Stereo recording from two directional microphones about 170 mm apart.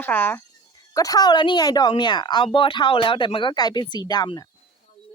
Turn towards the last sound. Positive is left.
turn(degrees=20)  # may be behind; listen again after turning